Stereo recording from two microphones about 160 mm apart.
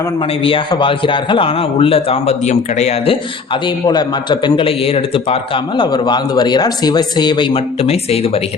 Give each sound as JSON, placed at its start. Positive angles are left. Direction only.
{"t": 0.4, "sound": "a man's voice", "side_deg": 30}